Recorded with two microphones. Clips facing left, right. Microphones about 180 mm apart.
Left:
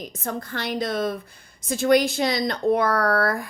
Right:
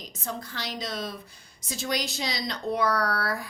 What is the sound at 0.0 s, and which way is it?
Speech, 55° left (ahead or behind).